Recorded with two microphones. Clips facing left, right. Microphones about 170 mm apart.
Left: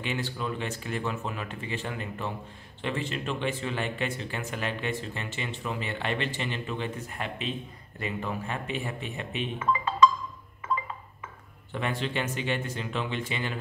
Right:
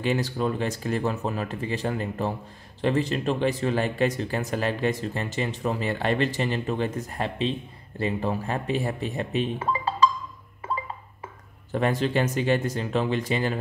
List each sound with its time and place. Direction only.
0.0 s speech: 40° right (ahead or behind)
10.6 s music: 35° right (ahead or behind)
11.7 s speech: 40° right (ahead or behind)